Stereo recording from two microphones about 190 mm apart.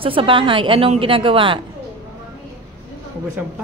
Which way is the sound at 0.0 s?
30° right (ahead or behind).